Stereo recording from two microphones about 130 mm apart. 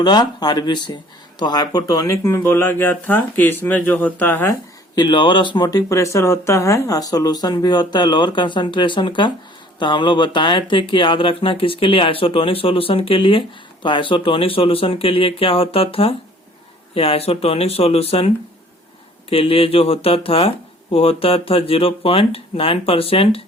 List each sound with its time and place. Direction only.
0.0 s speech: 35° left (ahead or behind); by 4.5 s 15° left (ahead or behind)
4.9 s speech: 35° left (ahead or behind)
19.3 s speech: 45° left (ahead or behind)